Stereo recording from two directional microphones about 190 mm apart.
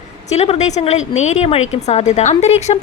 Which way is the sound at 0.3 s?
35° left (ahead or behind).